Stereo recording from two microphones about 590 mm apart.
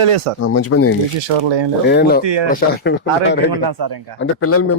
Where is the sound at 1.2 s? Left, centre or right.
Right.